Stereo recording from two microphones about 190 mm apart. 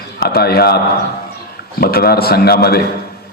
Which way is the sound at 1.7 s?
50° left (ahead or behind).